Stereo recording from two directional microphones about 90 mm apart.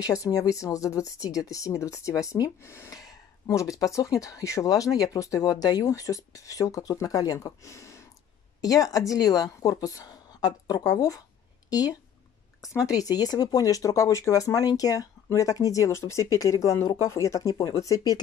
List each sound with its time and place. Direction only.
0.0 s speech: 40° left (ahead or behind)